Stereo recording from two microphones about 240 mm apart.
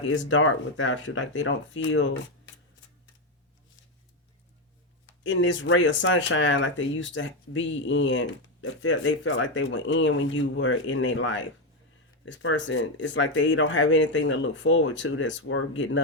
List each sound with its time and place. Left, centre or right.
0.0 s speech: left
5.2 s speech: left